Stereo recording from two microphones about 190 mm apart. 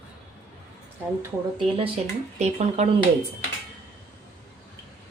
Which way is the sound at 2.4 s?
35° right (ahead or behind).